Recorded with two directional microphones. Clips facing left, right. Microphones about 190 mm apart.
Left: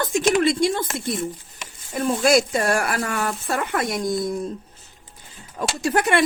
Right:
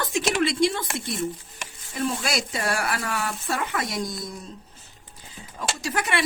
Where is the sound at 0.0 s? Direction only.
50° left (ahead or behind).